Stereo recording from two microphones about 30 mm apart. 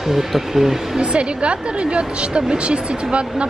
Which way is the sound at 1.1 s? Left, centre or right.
Right.